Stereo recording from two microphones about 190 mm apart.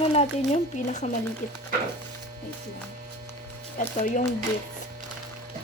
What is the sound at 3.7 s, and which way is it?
Mains hum, 40° left (ahead or behind).